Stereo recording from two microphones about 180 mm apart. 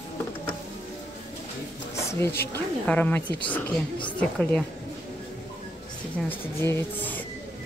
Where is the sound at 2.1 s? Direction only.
15° left (ahead or behind).